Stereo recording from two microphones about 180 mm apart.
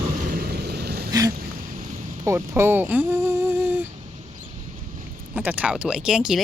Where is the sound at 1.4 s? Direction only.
50° right (ahead or behind).